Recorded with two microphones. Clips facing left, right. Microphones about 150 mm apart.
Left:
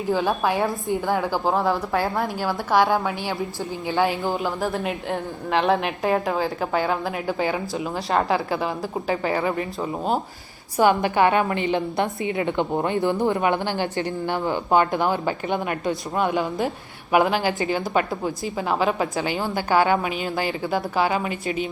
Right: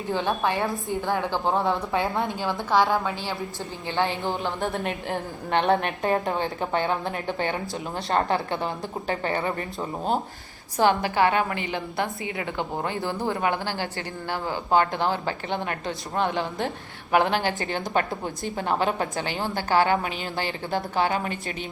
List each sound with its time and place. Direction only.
0.2 s a woman's voice: 5° left (ahead or behind)
10.8 s a woman's voice: 15° left (ahead or behind)
19.5 s a woman's voice: 15° left (ahead or behind)